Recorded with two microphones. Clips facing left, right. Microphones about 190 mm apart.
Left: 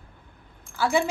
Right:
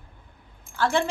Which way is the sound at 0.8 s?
10° left (ahead or behind).